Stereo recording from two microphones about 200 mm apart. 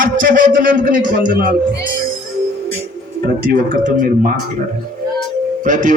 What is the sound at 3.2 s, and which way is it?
Speech, 45° right (ahead or behind).